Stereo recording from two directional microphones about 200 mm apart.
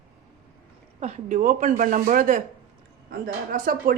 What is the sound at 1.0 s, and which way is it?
Speech, 35° right (ahead or behind).